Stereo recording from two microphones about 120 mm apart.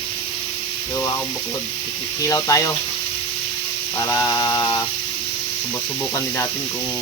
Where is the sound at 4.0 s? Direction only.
25° left (ahead or behind).